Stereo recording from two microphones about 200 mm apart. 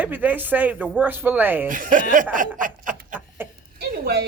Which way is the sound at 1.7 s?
40° right (ahead or behind).